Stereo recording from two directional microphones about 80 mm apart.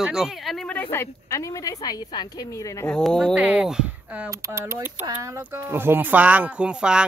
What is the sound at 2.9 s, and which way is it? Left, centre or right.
Speech, centre.